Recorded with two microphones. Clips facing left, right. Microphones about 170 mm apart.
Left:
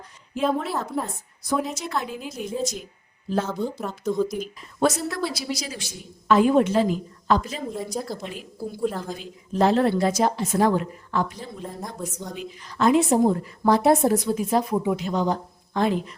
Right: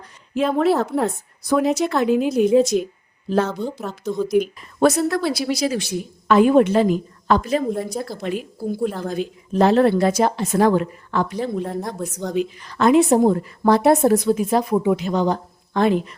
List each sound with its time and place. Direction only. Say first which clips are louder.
0.3 s a woman's voice: right 7 dB; 75° right (ahead or behind)
3.5 s a woman's voice: right 1 dB; 5° left (ahead or behind)
4.3 s speech: right 12 dB; 65° right (ahead or behind)
7.9 s a woman's voice: right 2 dB; centre (ahead or behind)
8.2 s a woman's voice: right 7 dB; 70° right (ahead or behind)